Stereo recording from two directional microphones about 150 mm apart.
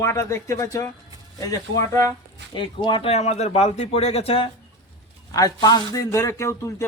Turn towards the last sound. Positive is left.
turn(degrees=20)  # may be behind; listen again after turning